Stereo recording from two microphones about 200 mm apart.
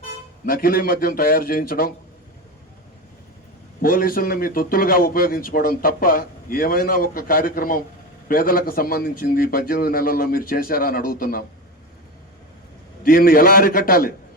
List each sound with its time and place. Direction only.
0.4 s speech: 45° left (ahead or behind)
3.8 s speech: 45° left (ahead or behind)
13.0 s speech: 45° left (ahead or behind)